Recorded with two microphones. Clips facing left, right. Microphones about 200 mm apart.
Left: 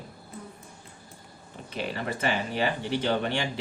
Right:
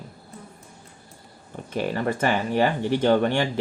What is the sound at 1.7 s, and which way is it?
Speech, 50° right (ahead or behind).